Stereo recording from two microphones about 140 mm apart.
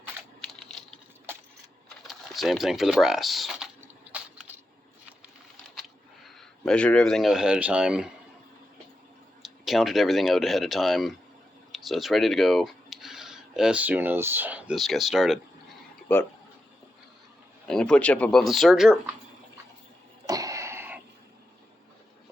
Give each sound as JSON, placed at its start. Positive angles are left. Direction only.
{"t": 2.0, "sound": "speech", "side_deg": 0}
{"t": 4.1, "sound": "a sound", "side_deg": -10}
{"t": 6.2, "sound": "speech", "side_deg": 5}
{"t": 9.4, "sound": "speech", "side_deg": 0}
{"t": 14.8, "sound": "speech", "side_deg": 0}
{"t": 16.1, "sound": "speech", "side_deg": 15}
{"t": 17.7, "sound": "speech", "side_deg": 5}
{"t": 20.2, "sound": "throat clearing", "side_deg": -25}